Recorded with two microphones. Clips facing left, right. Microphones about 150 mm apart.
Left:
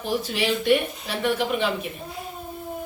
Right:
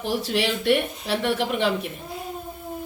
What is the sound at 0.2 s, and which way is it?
Speech, 90° right.